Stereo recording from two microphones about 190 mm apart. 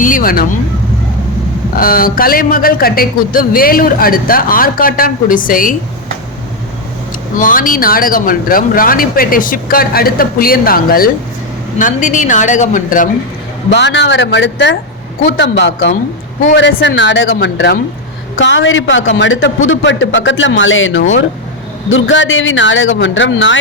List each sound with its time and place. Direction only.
0.0 s a man's voice: 45° left (ahead or behind)
1.7 s a man's voice: 50° left (ahead or behind)
7.3 s a man's voice: 45° left (ahead or behind)
13.7 s a man's voice: 65° left (ahead or behind)